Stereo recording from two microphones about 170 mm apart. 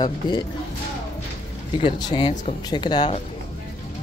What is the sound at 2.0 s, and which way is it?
Speech, 25° left (ahead or behind).